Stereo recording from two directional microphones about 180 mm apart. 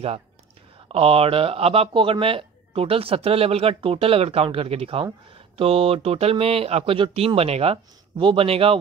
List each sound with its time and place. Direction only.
0.8 s speech: 30° right (ahead or behind)